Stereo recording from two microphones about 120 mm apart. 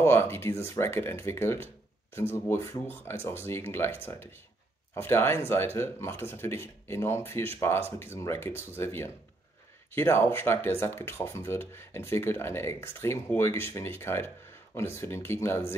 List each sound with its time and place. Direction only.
0.0 s speech: 20° left (ahead or behind)